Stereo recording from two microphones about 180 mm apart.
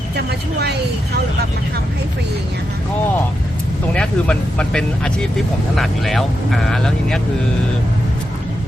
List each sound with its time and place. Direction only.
0.3 s speech: 65° right (ahead or behind)
3.9 s speech: 5° left (ahead or behind)